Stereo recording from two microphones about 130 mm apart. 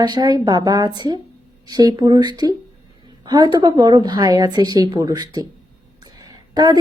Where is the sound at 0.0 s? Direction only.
30° right (ahead or behind).